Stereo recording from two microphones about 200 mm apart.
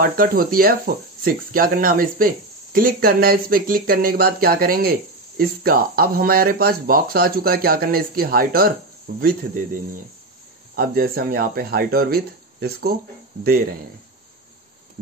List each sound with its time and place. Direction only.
0.0 s speech: 45° right (ahead or behind)